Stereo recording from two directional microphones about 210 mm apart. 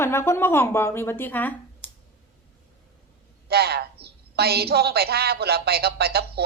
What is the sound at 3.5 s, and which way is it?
A woman's voice, 50° right (ahead or behind).